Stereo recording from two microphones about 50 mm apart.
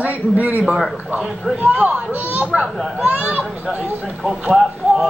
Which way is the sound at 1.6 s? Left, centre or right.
Right.